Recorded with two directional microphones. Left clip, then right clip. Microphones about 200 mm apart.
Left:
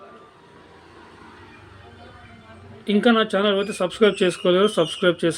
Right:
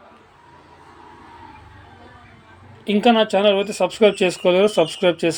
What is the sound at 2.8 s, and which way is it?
Speech, 10° right (ahead or behind).